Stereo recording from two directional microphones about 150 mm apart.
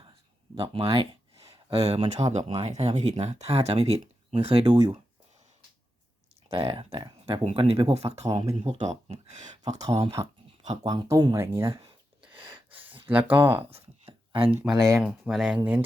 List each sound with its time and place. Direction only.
0.5 s speech: 35° right (ahead or behind)
6.5 s speech: 40° right (ahead or behind)
9.6 s speech: 25° right (ahead or behind)
12.3 s a sound: 30° right (ahead or behind)
13.3 s speech: 15° right (ahead or behind)
13.6 s a sound: 40° right (ahead or behind)
14.6 s speech: centre (ahead or behind)